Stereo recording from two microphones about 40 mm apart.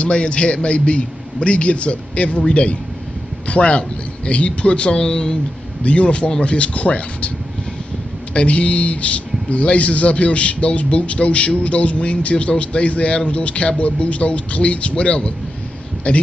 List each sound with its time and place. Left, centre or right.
0.0 s a man's voice: left
5.9 s a man's voice: left